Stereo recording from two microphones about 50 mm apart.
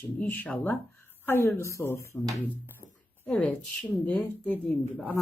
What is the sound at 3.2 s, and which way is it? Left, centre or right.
Speech, left.